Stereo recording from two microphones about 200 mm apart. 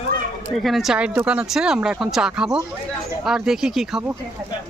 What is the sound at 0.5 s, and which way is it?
Speech, centre (ahead or behind).